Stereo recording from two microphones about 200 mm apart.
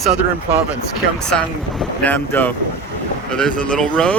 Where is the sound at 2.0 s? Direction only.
10° left (ahead or behind).